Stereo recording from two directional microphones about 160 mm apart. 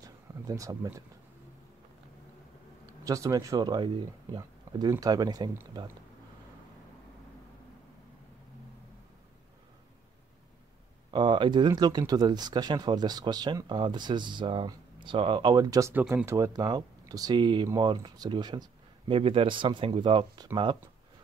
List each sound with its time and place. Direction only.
0.0 s a sound: 20° right (ahead or behind)
2.9 s speech: 20° right (ahead or behind)
11.1 s speech: 30° right (ahead or behind)